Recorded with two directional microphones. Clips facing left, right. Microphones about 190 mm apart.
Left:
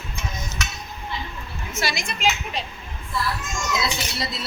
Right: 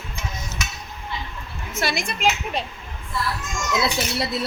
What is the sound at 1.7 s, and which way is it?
Speech, 55° right (ahead or behind).